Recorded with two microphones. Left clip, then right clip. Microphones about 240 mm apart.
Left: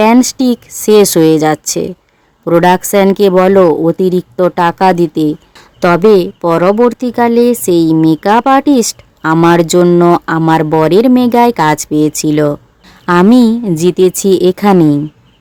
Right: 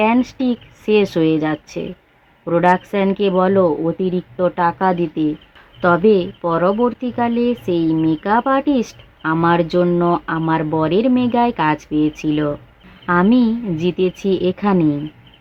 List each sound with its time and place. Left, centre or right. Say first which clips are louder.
0.0 s speech: left 8 dB; left